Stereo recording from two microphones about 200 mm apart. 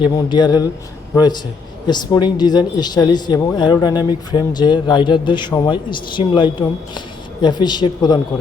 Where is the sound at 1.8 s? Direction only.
20° left (ahead or behind).